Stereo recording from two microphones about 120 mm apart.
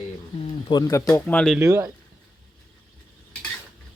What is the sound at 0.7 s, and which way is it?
Cutlery, 30° left (ahead or behind).